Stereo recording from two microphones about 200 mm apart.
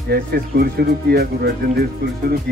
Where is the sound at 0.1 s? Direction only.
50° right (ahead or behind).